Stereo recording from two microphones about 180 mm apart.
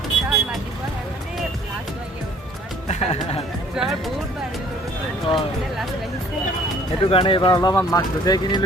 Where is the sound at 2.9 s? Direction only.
40° left (ahead or behind).